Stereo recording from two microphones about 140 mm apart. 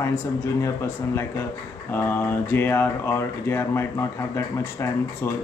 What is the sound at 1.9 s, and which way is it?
Speech, 15° left (ahead or behind).